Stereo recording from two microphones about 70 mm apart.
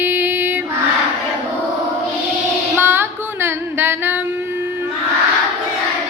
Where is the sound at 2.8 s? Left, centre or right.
Right.